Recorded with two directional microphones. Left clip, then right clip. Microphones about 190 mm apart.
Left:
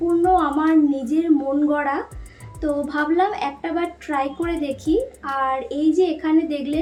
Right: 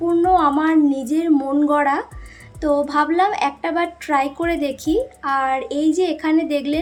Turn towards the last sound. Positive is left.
turn(degrees=-30)  # may be behind; listen again after turning